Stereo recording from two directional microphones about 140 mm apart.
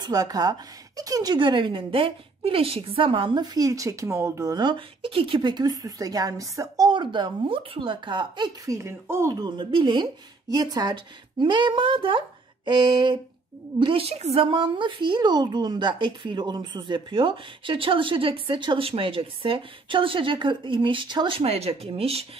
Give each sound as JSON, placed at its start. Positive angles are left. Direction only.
{"t": 0.0, "sound": "a woman's voice", "side_deg": -30}
{"t": 8.6, "sound": "a woman's voice", "side_deg": -20}